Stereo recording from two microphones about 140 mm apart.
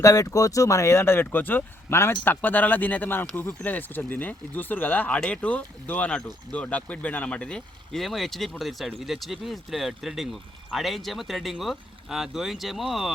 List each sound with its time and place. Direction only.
0.0 s speech: 25° left (ahead or behind); by 13.1 s centre (ahead or behind)